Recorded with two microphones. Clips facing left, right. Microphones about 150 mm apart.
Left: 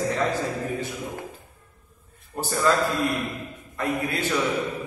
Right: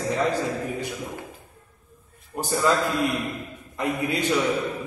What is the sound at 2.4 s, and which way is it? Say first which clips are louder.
Speech: right 1 dB; 15° right (ahead or behind).